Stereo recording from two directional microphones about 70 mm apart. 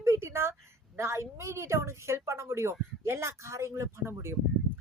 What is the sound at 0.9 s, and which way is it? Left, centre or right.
A woman's voice, right.